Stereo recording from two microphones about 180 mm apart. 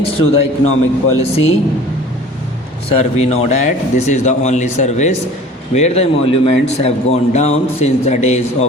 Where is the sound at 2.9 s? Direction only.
35° left (ahead or behind).